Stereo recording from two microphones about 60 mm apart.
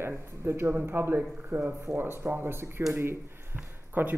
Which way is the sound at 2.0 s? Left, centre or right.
Right.